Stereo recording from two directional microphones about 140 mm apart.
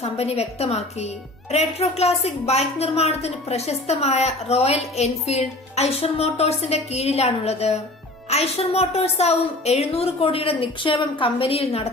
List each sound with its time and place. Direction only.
0.0 s a woman's voice: 45° left (ahead or behind)